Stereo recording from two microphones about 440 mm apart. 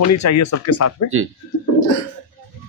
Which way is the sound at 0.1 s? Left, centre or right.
Left.